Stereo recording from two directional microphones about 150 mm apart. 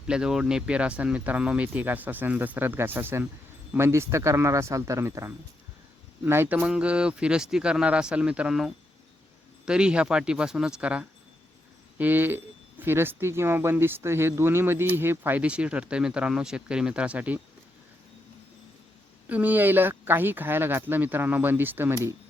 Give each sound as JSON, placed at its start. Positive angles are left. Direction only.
{"t": 0.1, "sound": "speech", "side_deg": -5}
{"t": 19.3, "sound": "speech", "side_deg": -10}